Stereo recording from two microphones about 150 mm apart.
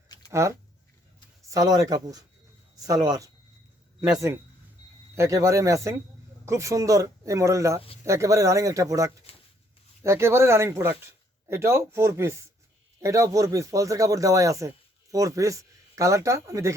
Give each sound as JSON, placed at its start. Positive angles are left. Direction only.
{"t": 0.3, "sound": "speech", "side_deg": -20}